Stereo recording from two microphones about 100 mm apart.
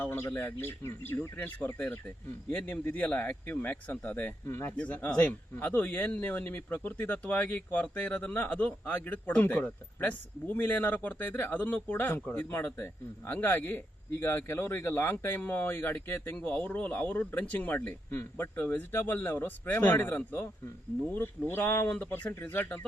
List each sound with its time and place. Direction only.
0.0 s a man's voice: 20° left (ahead or behind)
21.8 s speech: 10° left (ahead or behind)
22.1 s a man's voice: 20° left (ahead or behind)